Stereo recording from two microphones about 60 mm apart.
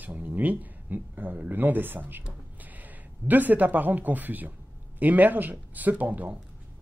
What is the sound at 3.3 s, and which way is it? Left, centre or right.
Speech, right.